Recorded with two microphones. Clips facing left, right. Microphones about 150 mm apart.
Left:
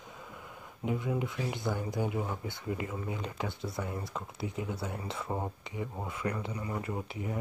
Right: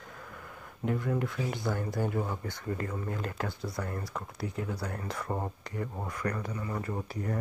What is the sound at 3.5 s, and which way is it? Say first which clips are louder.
Speech: right 1 dB; 25° left (ahead or behind).